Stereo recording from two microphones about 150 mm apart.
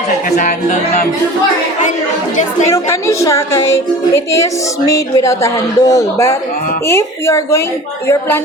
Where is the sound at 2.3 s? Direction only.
55° left (ahead or behind).